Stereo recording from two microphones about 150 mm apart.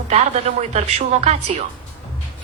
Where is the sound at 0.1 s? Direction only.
45° right (ahead or behind).